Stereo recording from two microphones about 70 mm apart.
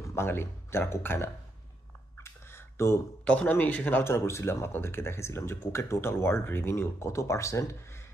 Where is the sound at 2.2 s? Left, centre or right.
Left.